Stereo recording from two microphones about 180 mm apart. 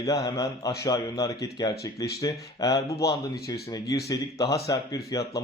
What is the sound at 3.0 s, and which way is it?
Speech, 65° left (ahead or behind).